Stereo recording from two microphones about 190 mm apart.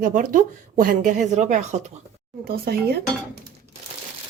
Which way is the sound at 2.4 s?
55° right (ahead or behind).